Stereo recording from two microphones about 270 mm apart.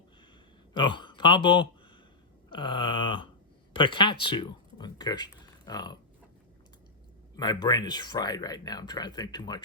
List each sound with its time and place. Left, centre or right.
0.7 s speech: centre
7.3 s speech: centre